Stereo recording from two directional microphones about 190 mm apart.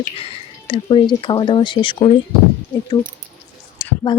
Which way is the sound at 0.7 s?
25° left (ahead or behind).